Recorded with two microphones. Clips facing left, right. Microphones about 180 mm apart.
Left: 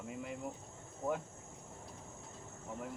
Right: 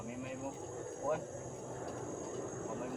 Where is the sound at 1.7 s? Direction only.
65° right (ahead or behind).